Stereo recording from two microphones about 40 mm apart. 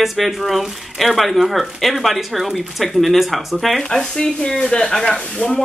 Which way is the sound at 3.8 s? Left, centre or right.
Centre.